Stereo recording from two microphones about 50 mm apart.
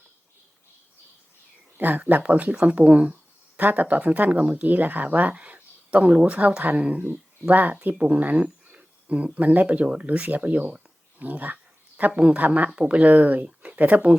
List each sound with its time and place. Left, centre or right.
1.8 s speech: right
11.2 s a sound: right
12.4 s speech: right